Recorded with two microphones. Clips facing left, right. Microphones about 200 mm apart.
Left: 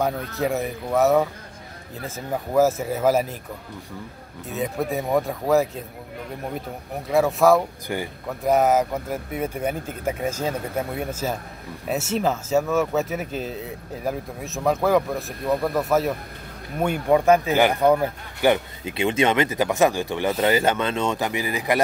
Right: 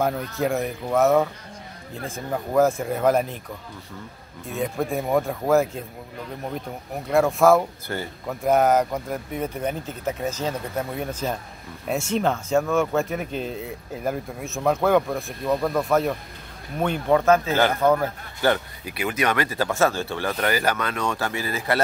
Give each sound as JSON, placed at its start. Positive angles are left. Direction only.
{"t": 0.0, "sound": "speech", "side_deg": 0}
{"t": 4.5, "sound": "speech", "side_deg": 5}
{"t": 7.1, "sound": "speech", "side_deg": 0}
{"t": 7.9, "sound": "a man's voice", "side_deg": 15}
{"t": 8.3, "sound": "a man's voice", "side_deg": 0}
{"t": 12.1, "sound": "a man's voice", "side_deg": 5}